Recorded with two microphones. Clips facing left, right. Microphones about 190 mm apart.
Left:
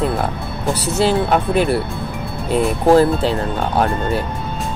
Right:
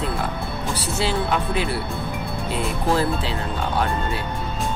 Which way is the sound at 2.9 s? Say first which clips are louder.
Left 10 dB; 50° left (ahead or behind).